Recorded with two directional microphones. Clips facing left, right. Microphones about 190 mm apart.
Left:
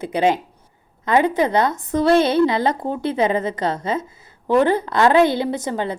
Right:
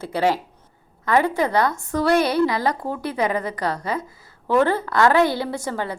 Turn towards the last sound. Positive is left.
turn(degrees=20)  # may be behind; listen again after turning